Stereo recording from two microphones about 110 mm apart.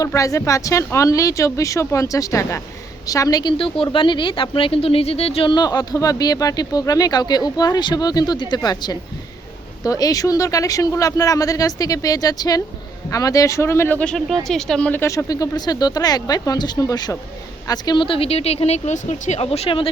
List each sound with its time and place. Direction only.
0.0 s speech: 30° left (ahead or behind)
3.6 s speech: 50° left (ahead or behind); by 15.0 s 10° left (ahead or behind)
15.0 s a woman's voice: 30° left (ahead or behind); by 19.9 s 60° left (ahead or behind)